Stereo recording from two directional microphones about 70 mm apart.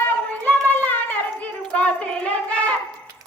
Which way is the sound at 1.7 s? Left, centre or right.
Centre.